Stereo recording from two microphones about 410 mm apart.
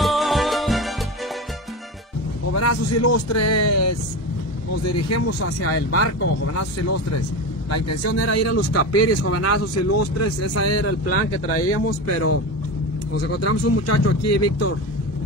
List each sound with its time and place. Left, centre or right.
0.0 s music: centre
2.5 s speech: left
7.7 s speech: left